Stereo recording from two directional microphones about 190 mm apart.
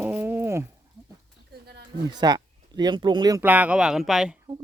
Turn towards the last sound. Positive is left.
turn(degrees=-5)  # may be behind; listen again after turning